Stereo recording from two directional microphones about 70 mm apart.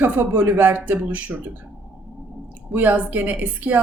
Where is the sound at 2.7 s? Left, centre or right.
Right.